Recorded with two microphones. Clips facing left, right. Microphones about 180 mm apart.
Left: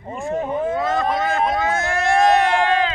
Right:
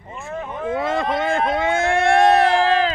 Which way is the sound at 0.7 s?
25° right (ahead or behind).